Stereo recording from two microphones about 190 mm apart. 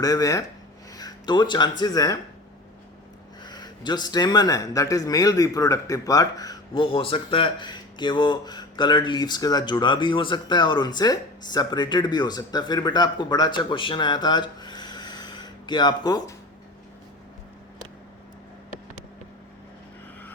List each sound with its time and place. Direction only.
0.0 s speech: 20° left (ahead or behind)
0.9 s a sound: 20° left (ahead or behind)
1.8 s speech: 20° left (ahead or behind)
3.4 s speech: 20° left (ahead or behind)